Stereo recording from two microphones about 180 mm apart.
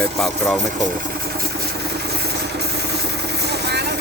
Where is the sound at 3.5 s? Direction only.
65° right (ahead or behind).